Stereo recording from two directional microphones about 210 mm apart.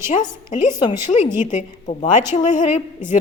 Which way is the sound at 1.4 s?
35° left (ahead or behind).